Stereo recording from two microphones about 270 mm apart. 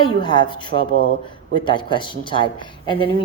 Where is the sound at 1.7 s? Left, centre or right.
Centre.